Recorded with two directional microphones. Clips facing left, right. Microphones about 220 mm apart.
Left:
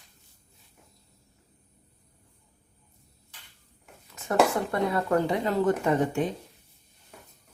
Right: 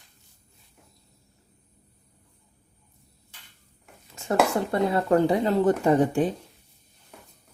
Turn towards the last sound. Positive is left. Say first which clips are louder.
# right 4 dB
turn(degrees=-35)  # may be behind; listen again after turning